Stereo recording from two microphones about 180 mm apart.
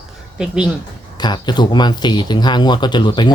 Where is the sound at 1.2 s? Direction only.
25° left (ahead or behind).